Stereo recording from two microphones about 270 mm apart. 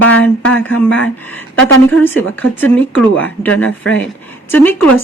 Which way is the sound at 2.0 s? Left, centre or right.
Centre.